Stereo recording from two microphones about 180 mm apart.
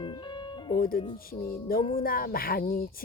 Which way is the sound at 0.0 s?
25° left (ahead or behind).